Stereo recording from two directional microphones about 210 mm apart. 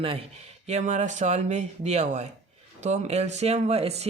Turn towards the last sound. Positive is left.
turn(degrees=-30)  # may be behind; listen again after turning